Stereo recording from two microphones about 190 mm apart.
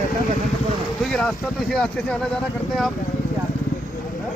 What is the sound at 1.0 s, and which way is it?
Speech, centre (ahead or behind).